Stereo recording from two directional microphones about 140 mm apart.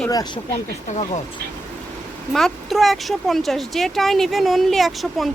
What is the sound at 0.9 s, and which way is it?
Speech, 55° left (ahead or behind).